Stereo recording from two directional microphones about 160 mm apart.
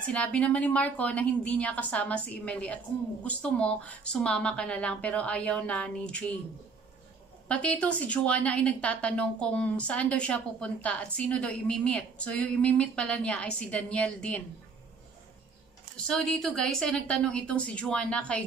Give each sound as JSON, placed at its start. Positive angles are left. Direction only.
{"t": 0.1, "sound": "a woman's voice", "side_deg": 5}
{"t": 7.4, "sound": "a woman's voice", "side_deg": 10}
{"t": 16.1, "sound": "a woman's voice", "side_deg": 5}